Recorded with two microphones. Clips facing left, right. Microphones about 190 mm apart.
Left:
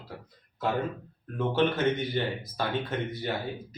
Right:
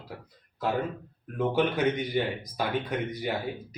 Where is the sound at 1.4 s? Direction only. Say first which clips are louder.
Even; 15° right (ahead or behind).